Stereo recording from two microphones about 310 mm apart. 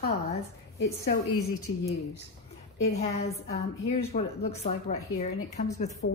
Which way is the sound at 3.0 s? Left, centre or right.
Centre.